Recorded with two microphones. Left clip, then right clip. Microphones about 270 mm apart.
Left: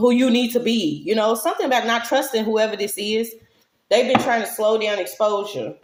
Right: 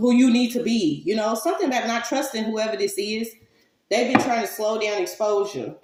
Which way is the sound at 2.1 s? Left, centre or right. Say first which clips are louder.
Left 6 dB; left.